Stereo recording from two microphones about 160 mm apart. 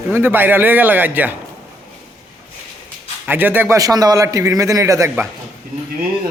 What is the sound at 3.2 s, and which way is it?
A man's voice, 10° right (ahead or behind).